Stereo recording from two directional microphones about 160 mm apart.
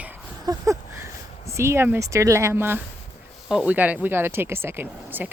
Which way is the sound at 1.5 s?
15° right (ahead or behind).